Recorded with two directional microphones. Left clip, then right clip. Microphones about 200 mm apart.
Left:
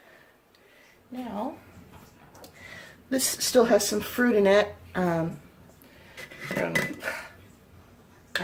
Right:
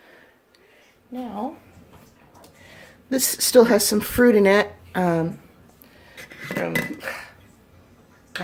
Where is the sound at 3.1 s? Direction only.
45° right (ahead or behind).